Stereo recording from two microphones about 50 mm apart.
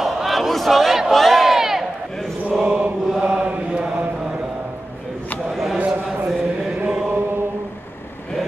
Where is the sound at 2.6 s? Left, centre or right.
Right.